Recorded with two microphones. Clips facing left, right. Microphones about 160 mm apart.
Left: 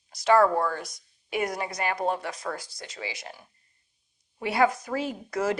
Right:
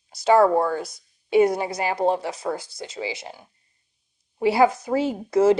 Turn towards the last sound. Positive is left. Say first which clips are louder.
# right 10 dB
turn(degrees=-25)  # may be behind; listen again after turning